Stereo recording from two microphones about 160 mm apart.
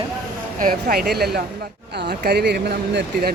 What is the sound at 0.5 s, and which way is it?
Speech, 65° right (ahead or behind).